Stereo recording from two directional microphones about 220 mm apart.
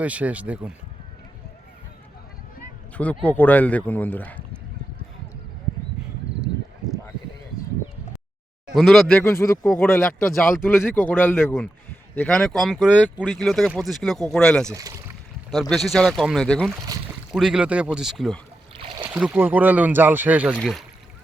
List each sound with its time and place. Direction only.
0.0 s speech: 5° right (ahead or behind)
3.2 s speech: 10° left (ahead or behind)
8.7 s speech: centre (ahead or behind)
14.7 s speech: 15° right (ahead or behind)
15.7 s speech: centre (ahead or behind)
18.8 s a sound: 25° right (ahead or behind)
19.1 s speech: 5° right (ahead or behind)